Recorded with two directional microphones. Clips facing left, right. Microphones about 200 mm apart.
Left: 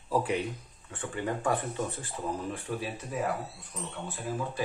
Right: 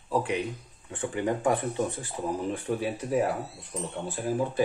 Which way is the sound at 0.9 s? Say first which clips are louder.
Right 5 dB; 20° right (ahead or behind).